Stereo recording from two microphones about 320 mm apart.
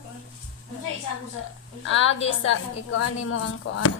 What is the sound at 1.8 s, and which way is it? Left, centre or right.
A woman's voice, left.